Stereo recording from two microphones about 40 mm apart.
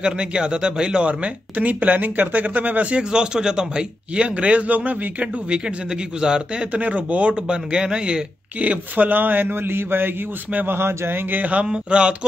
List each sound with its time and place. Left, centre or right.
0.0 s speech: right
3.0 s a man's voice: right
6.2 s a man's voice: centre
6.7 s a man's voice: right
8.5 s a man's voice: right
10.7 s speech: right
11.6 s a man's voice: right